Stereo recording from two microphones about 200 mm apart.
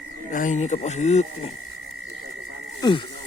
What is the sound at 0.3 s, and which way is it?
Speech, 40° left (ahead or behind).